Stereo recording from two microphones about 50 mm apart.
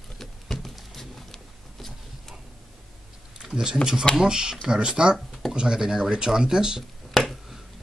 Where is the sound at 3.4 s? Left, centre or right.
Centre.